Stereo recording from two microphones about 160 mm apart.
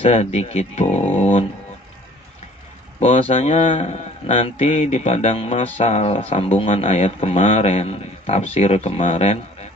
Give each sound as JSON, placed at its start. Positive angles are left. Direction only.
{"t": 0.0, "sound": "a man's voice", "side_deg": 40}
{"t": 3.0, "sound": "a man's voice", "side_deg": 40}